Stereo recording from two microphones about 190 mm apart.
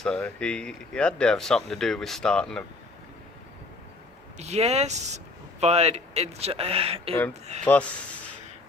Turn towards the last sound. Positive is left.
turn(degrees=5)  # may be behind; listen again after turning